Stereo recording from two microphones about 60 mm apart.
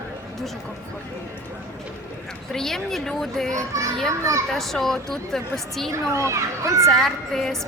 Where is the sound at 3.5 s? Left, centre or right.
Right.